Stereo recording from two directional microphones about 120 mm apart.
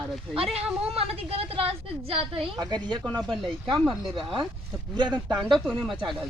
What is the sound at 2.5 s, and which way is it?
Speech, 35° right (ahead or behind).